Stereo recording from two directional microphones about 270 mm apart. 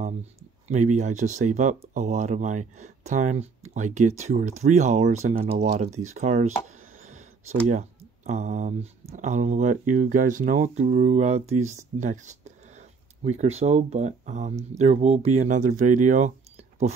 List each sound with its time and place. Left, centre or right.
0.7 s speech: right
7.1 s a sound: right
8.3 s speech: right